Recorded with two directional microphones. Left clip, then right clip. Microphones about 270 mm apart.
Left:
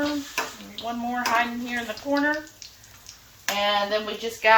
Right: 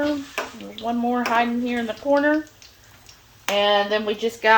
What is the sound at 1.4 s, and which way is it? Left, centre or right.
Speech, right.